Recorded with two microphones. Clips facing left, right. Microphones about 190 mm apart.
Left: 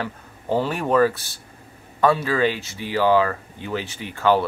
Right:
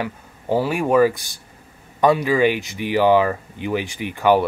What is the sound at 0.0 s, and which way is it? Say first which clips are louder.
Speech: right 2 dB; 10° right (ahead or behind).